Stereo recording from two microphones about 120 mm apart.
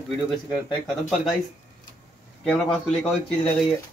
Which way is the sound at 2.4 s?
5° left (ahead or behind).